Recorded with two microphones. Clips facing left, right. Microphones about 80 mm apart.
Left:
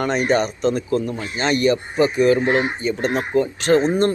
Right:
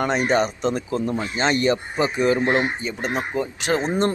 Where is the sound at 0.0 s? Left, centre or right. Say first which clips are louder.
Left 1 dB; centre.